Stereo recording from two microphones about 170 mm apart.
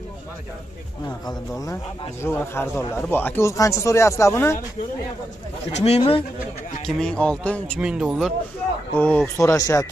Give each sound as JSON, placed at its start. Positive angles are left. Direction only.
{"t": 2.2, "sound": "speech", "side_deg": 15}
{"t": 5.7, "sound": "speech", "side_deg": 40}
{"t": 7.0, "sound": "speech", "side_deg": 5}
{"t": 7.8, "sound": "speech", "side_deg": -5}
{"t": 8.9, "sound": "speech", "side_deg": 10}